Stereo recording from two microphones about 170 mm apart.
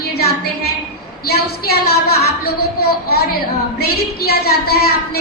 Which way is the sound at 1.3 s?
70° left (ahead or behind).